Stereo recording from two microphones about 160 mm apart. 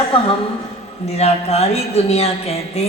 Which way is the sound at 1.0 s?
40° left (ahead or behind).